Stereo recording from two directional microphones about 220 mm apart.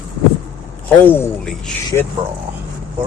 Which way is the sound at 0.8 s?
10° left (ahead or behind).